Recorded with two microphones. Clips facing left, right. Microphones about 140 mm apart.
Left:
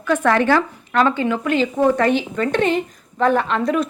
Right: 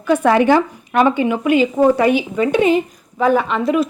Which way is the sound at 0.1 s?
15° right (ahead or behind).